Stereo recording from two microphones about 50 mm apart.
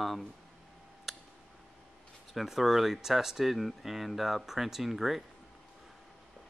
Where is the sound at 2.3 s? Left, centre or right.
Centre.